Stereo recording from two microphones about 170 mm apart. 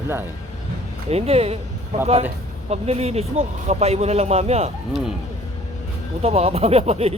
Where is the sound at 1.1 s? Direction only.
35° right (ahead or behind).